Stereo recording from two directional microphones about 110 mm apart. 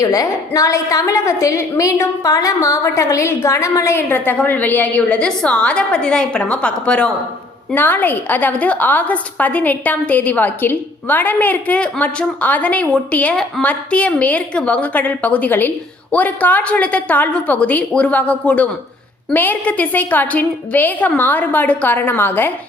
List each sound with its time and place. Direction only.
0.0 s a woman's voice: 30° left (ahead or behind)